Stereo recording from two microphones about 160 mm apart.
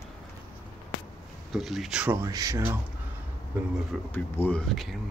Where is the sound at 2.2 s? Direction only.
20° right (ahead or behind).